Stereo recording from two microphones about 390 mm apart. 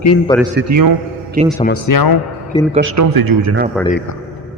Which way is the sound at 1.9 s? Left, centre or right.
Left.